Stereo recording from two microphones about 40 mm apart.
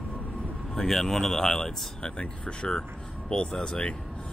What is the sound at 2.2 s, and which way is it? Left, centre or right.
Speech, left.